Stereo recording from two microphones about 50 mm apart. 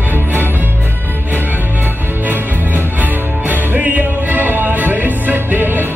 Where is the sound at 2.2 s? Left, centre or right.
Right.